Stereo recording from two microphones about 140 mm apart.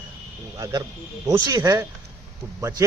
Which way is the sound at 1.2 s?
20° right (ahead or behind).